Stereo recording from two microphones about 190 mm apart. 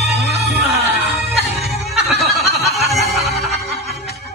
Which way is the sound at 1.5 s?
60° right (ahead or behind).